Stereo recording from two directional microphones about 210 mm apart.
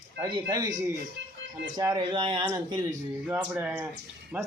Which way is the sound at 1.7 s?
20° right (ahead or behind).